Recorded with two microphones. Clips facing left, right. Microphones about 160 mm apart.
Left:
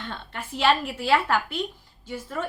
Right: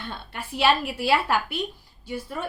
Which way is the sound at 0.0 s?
10° right (ahead or behind).